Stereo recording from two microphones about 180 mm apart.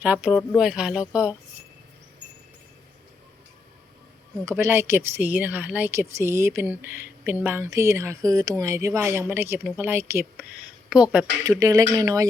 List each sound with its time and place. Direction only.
0.0 s speech: 5° right (ahead or behind)
4.4 s a woman's voice: 15° right (ahead or behind)
11.6 s speech: 20° right (ahead or behind)